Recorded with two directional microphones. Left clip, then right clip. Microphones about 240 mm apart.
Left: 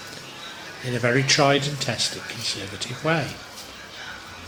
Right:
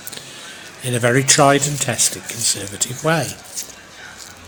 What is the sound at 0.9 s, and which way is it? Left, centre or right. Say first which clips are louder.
Speech: right 5 dB; right.